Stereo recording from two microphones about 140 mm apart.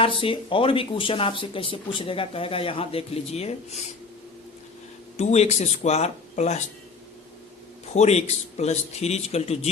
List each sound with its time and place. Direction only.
0.0 s speech: 40° left (ahead or behind)
5.1 s a man's voice: 55° left (ahead or behind)
7.9 s a man's voice: 50° left (ahead or behind)